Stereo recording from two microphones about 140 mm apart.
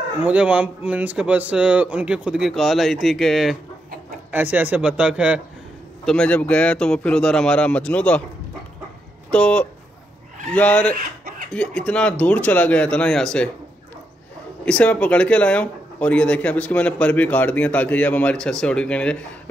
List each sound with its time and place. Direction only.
0.2 s speech: 10° right (ahead or behind)
4.3 s speech: 10° right (ahead or behind)
6.0 s speech: 10° left (ahead or behind)
9.3 s speech: 10° left (ahead or behind)
11.0 s chicken: 90° right
11.5 s speech: 5° left (ahead or behind)
14.6 s speech: 10° left (ahead or behind)